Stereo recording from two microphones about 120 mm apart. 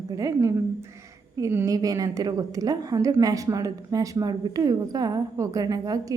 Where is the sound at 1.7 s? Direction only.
30° right (ahead or behind).